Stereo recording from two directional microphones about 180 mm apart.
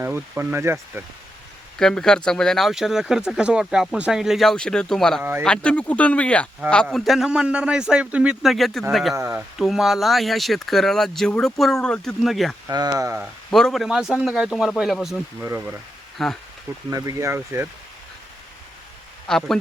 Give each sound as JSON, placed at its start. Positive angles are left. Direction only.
{"t": 0.0, "sound": "speech", "side_deg": -15}
{"t": 1.8, "sound": "speech", "side_deg": 5}
{"t": 9.1, "sound": "speech", "side_deg": -15}
{"t": 9.6, "sound": "speech", "side_deg": 0}
{"t": 12.6, "sound": "speech", "side_deg": -20}
{"t": 13.1, "sound": "speech", "side_deg": 0}
{"t": 15.4, "sound": "speech", "side_deg": -15}
{"t": 16.1, "sound": "speech", "side_deg": 0}
{"t": 16.9, "sound": "speech", "side_deg": -15}
{"t": 19.3, "sound": "speech", "side_deg": 5}